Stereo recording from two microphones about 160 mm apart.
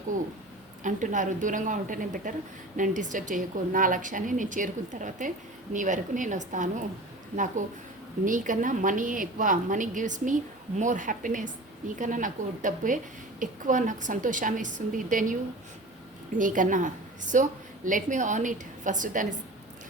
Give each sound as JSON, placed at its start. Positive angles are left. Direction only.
{"t": 0.8, "sound": "a woman's voice", "side_deg": -50}
{"t": 16.4, "sound": "a woman's voice", "side_deg": -55}